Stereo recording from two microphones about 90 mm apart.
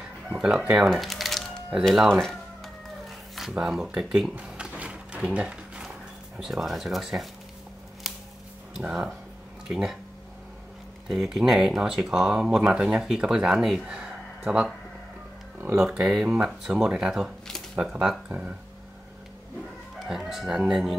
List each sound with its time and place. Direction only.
0.3 s speech: 10° right (ahead or behind)
2.0 s music: 5° left (ahead or behind)
3.5 s cash register: 5° right (ahead or behind)
8.7 s speech: 10° right (ahead or behind)
11.1 s speech: 5° right (ahead or behind)
15.8 s speech: 10° right (ahead or behind)
20.1 s speech: 5° right (ahead or behind)